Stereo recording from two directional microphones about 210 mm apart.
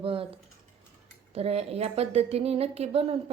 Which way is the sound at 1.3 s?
30° right (ahead or behind).